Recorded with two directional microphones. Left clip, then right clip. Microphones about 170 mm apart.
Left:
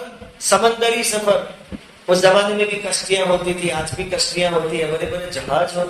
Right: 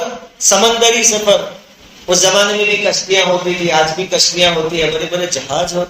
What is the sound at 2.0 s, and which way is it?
Speech, 20° right (ahead or behind).